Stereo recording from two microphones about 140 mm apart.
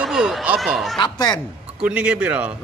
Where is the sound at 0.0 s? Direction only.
5° right (ahead or behind).